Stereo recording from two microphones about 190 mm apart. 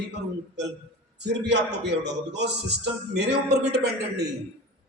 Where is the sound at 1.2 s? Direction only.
65° right (ahead or behind).